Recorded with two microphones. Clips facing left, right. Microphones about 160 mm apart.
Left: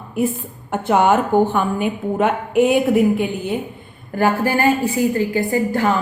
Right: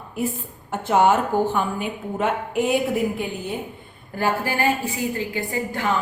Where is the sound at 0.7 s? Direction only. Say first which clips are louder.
Left 3 dB; 60° left (ahead or behind).